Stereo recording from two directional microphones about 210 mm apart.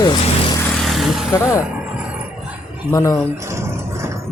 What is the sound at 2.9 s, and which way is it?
Speech, 15° left (ahead or behind).